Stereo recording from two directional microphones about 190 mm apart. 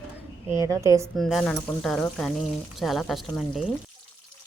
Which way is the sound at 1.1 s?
Centre (ahead or behind).